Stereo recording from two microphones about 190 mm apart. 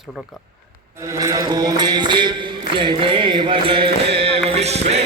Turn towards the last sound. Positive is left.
turn(degrees=-35)  # may be behind; listen again after turning